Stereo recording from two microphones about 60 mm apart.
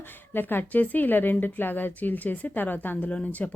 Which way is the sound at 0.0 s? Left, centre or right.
Left.